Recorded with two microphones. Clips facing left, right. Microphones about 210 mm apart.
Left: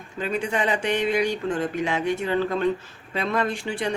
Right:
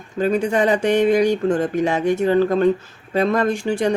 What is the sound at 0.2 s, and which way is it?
Speech, 40° right (ahead or behind).